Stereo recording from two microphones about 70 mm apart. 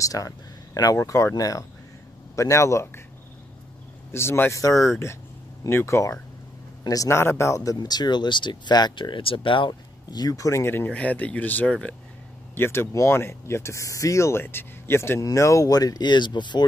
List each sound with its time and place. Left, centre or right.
0.0 s speech: left
4.1 s speech: left
4.6 s speech: left
5.7 s speech: left
6.8 s a man's voice: left
7.1 s speech: left
7.8 s speech: left
10.4 s speech: left
10.9 s speech: left
12.5 s speech: left
14.4 s speech: left
15.1 s speech: left